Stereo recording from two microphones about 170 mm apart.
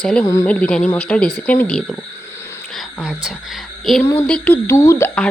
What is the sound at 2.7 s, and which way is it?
Speech, 5° right (ahead or behind).